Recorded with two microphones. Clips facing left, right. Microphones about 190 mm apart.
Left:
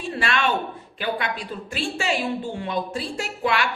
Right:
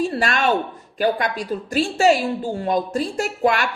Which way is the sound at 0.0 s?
40° right (ahead or behind).